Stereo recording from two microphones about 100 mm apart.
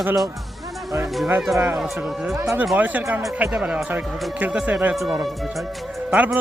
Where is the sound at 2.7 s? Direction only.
15° right (ahead or behind).